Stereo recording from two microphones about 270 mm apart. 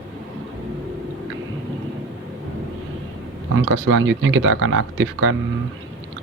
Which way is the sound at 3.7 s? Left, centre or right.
Right.